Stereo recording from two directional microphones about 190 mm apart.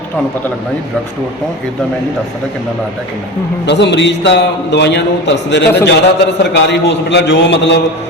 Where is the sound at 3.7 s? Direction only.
65° left (ahead or behind).